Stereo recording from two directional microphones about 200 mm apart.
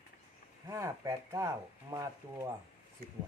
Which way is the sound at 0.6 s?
15° right (ahead or behind).